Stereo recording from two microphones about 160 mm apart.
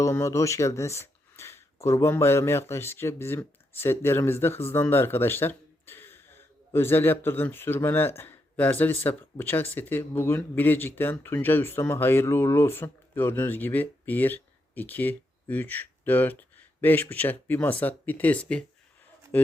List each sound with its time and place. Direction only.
0.0 s speech: 15° left (ahead or behind)
4.7 s a sound: 15° left (ahead or behind)
6.7 s speech: 15° left (ahead or behind)